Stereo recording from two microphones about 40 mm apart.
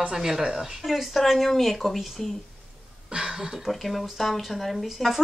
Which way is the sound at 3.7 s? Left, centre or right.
Centre.